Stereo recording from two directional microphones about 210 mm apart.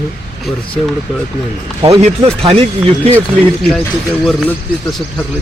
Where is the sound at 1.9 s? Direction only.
30° right (ahead or behind).